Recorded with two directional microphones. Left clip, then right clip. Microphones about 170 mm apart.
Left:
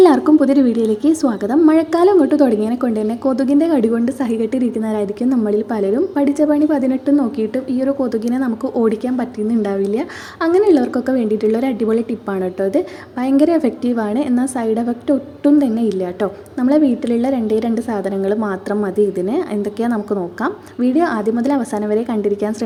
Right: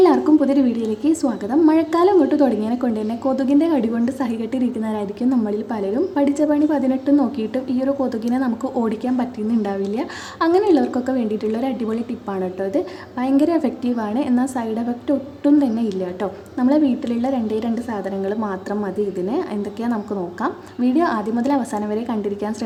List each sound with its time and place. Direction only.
0.0 s a woman's voice: 25° left (ahead or behind)